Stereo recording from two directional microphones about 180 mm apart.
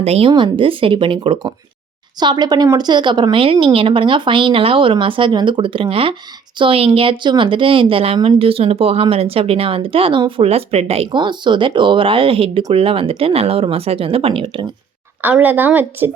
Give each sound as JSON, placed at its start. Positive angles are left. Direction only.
{"t": 0.0, "sound": "speech", "side_deg": -35}
{"t": 15.2, "sound": "a woman's voice", "side_deg": -10}